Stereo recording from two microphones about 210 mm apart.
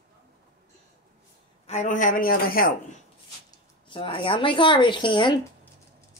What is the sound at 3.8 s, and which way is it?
Speech, 25° left (ahead or behind).